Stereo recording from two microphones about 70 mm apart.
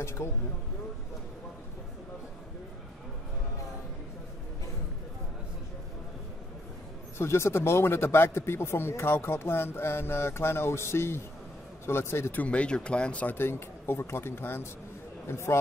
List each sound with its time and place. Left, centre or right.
0.0 s a man's voice: left
7.2 s a man's voice: left
12.4 s speech: centre
13.4 s a man's voice: left